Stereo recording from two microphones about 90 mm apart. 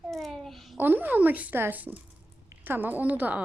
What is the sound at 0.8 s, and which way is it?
A woman's voice, 20° right (ahead or behind).